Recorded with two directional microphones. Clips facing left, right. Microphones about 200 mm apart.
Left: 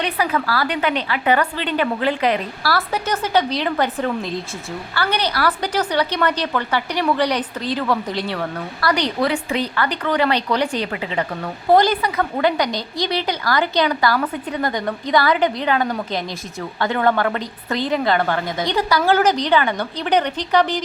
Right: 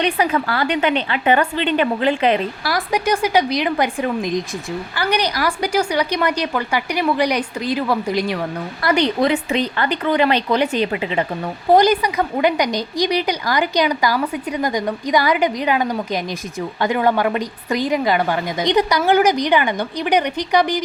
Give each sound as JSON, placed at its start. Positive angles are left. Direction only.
{"t": 0.0, "sound": "a woman's voice", "side_deg": -25}